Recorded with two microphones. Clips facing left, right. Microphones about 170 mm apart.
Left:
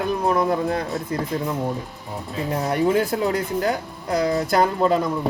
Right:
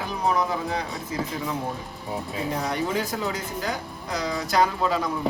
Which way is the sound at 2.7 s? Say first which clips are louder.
Left 7 dB; 55° left (ahead or behind).